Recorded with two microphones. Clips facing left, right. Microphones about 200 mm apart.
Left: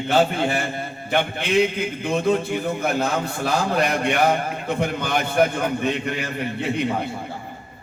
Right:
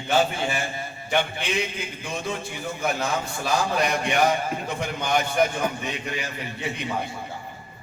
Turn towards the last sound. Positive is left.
turn(degrees=60)  # may be behind; listen again after turning